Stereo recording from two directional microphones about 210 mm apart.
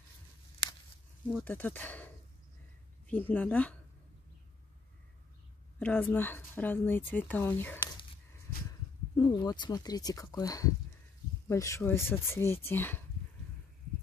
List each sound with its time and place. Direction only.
1.4 s speech: 10° left (ahead or behind)
5.8 s speech: 5° left (ahead or behind)
9.1 s speech: 20° left (ahead or behind)